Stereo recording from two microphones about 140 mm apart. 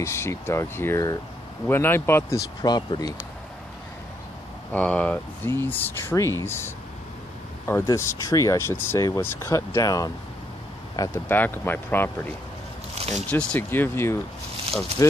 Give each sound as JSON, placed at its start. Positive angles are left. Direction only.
{"t": 0.0, "sound": "speech", "side_deg": 20}
{"t": 4.7, "sound": "speech", "side_deg": 10}
{"t": 11.2, "sound": "speech", "side_deg": 15}
{"t": 12.9, "sound": "squish", "side_deg": -45}
{"t": 13.3, "sound": "speech", "side_deg": 10}